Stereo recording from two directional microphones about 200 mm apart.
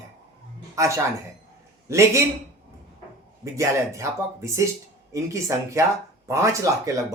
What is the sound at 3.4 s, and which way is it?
Speech, 15° right (ahead or behind).